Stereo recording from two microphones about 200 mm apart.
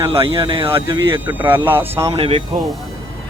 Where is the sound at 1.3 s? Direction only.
10° right (ahead or behind).